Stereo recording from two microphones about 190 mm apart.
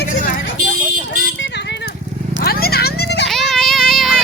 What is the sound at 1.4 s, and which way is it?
Clip-clop, 65° left (ahead or behind).